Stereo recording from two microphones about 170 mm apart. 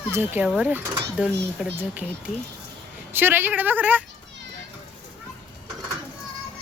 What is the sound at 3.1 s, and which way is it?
Speech, 10° right (ahead or behind).